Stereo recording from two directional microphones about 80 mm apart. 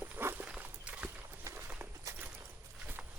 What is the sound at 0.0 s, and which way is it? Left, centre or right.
Walk, right.